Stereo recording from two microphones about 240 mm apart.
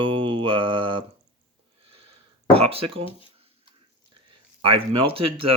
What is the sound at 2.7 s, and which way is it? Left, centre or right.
Speech, right.